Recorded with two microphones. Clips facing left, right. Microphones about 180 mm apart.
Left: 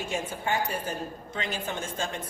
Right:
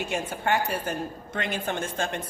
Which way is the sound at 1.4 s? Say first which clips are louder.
Right 4 dB; 60° right (ahead or behind).